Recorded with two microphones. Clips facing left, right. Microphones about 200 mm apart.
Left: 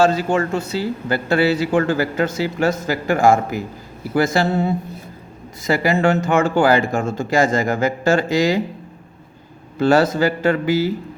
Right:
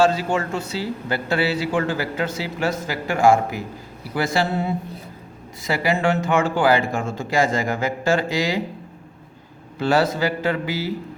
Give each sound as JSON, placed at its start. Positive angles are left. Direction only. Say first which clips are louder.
{"t": 0.1, "sound": "a man's voice", "louder": "left 4 dB", "side_deg": 45}
{"t": 9.7, "sound": "a man's voice", "louder": "left 4 dB", "side_deg": 45}